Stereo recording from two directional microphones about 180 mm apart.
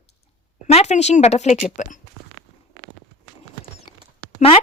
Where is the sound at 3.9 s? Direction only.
25° left (ahead or behind).